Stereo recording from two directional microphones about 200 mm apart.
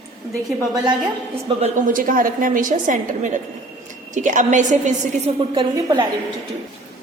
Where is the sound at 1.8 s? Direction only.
45° right (ahead or behind); by 6.0 s 20° right (ahead or behind).